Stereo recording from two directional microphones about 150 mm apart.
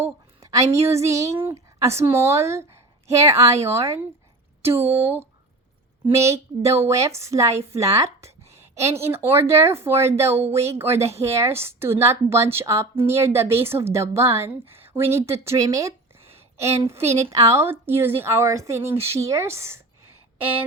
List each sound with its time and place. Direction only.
0.0 s a woman's voice: 20° right (ahead or behind)